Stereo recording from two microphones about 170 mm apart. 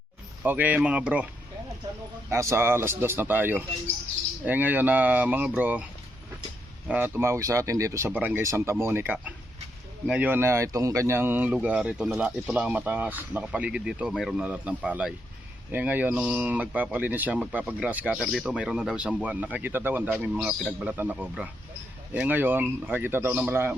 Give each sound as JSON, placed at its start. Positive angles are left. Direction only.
{"t": 0.4, "sound": "speech", "side_deg": -10}
{"t": 2.3, "sound": "speech", "side_deg": -15}
{"t": 6.8, "sound": "speech", "side_deg": -10}